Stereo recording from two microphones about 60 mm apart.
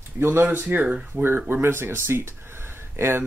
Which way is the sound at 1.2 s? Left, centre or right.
Right.